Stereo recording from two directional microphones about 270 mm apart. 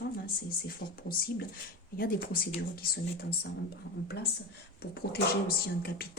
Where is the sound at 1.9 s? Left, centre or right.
Left.